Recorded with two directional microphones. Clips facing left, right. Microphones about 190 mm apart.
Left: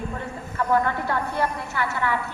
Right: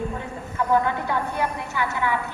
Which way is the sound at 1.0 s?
15° right (ahead or behind).